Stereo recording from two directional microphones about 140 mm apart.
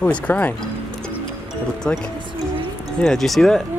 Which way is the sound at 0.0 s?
10° left (ahead or behind).